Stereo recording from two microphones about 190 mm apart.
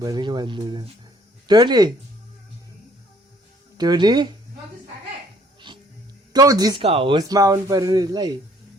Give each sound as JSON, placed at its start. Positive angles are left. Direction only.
{"t": 0.0, "sound": "speech", "side_deg": -20}
{"t": 3.8, "sound": "speech", "side_deg": -20}
{"t": 5.5, "sound": "music", "side_deg": -25}
{"t": 6.3, "sound": "speech", "side_deg": -20}